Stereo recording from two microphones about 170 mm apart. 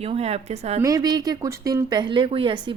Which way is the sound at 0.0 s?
35° right (ahead or behind).